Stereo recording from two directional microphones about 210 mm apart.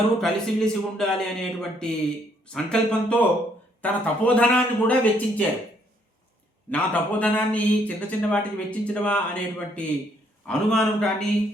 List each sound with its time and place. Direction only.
0.2 s a man's voice: 5° left (ahead or behind)
6.7 s a man's voice: 5° left (ahead or behind)